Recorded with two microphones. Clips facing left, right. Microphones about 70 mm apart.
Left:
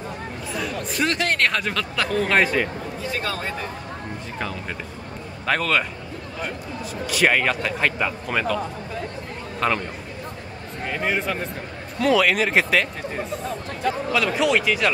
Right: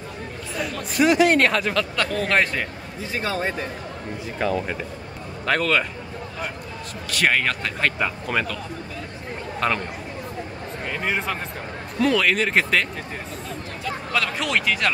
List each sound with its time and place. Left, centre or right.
0.6 s speech: centre
3.1 s speech: right
4.4 s speech: centre
7.1 s speech: centre
9.6 s speech: centre
10.9 s speech: centre
14.1 s speech: centre